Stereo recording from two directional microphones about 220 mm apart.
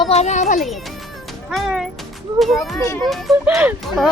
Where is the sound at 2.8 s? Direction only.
15° left (ahead or behind).